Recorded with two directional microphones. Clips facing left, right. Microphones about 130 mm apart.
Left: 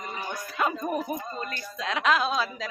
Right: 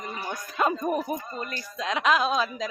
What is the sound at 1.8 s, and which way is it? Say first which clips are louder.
Speech: right 1 dB; 15° right (ahead or behind).